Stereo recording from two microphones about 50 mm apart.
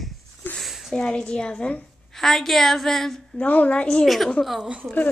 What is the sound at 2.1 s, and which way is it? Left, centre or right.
Speech, centre.